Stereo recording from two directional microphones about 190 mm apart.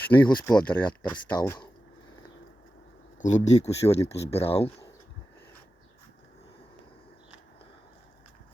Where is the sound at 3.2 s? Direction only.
40° left (ahead or behind).